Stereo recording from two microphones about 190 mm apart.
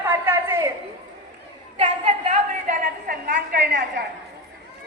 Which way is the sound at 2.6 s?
50° right (ahead or behind).